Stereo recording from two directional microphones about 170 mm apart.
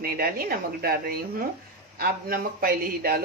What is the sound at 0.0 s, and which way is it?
A woman's voice, 60° right (ahead or behind).